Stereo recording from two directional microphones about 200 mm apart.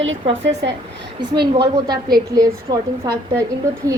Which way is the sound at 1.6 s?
20° right (ahead or behind).